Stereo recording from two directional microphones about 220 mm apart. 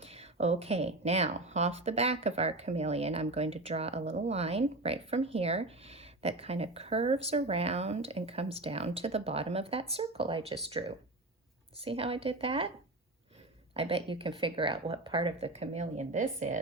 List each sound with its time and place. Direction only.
0.0 s speech: 30° right (ahead or behind)
13.7 s speech: 25° right (ahead or behind)